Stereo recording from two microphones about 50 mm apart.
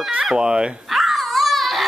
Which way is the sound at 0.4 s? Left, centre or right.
Centre.